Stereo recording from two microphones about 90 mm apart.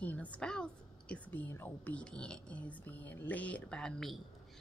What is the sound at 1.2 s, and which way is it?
Speech, 20° left (ahead or behind).